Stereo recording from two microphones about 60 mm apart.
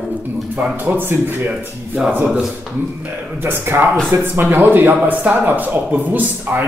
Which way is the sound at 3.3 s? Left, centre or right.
Right.